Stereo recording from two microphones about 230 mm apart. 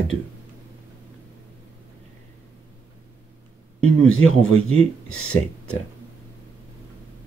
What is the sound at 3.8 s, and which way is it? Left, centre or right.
Speech, left.